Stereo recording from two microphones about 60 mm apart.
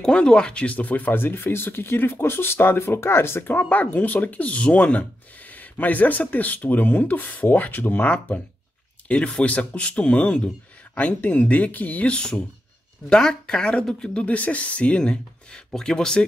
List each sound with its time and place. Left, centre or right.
0.0 s speech: centre